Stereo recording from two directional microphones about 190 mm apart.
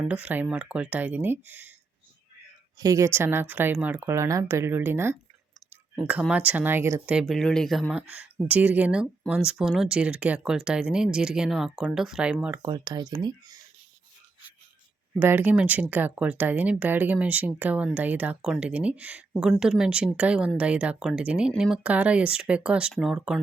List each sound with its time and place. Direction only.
0.0 s speech: 5° right (ahead or behind)
2.7 s speech: 15° right (ahead or behind)
12.6 s speech: 20° right (ahead or behind)
15.2 s speech: 10° right (ahead or behind)